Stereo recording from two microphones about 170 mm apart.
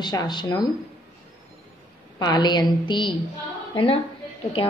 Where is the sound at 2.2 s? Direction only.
25° left (ahead or behind).